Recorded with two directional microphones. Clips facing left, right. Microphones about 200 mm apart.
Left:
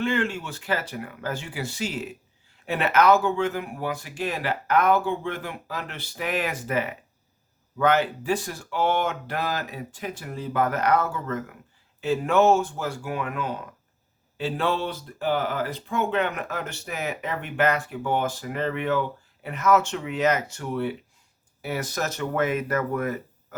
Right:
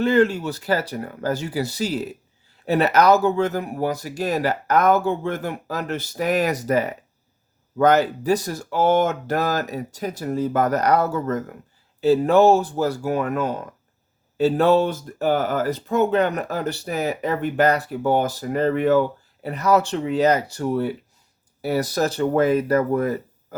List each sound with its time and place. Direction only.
0.0 s speech: 40° right (ahead or behind)